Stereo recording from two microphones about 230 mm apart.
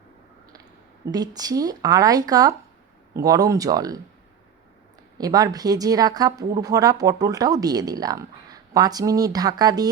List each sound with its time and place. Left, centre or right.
1.1 s speech: centre
5.1 s speech: centre